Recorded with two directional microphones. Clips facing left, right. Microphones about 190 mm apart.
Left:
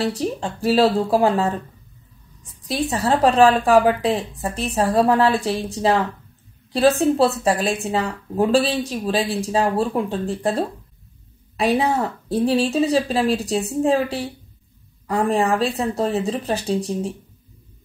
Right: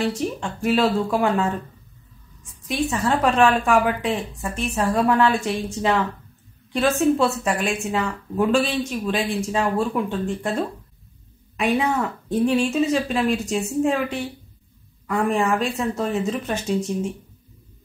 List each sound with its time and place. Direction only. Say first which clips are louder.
0.0 s speech: left 1 dB; 35° left (ahead or behind)